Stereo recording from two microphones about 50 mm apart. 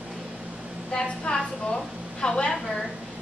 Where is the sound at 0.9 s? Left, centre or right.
Left.